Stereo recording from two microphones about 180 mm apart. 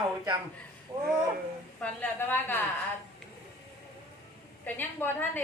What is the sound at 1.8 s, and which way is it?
Speech, 10° left (ahead or behind).